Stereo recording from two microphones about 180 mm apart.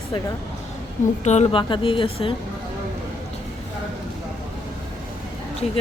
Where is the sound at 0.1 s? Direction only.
30° left (ahead or behind).